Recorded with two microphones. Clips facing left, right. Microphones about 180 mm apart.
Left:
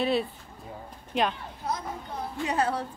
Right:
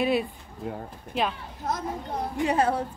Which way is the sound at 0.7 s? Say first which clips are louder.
Right 9 dB; 70° right (ahead or behind).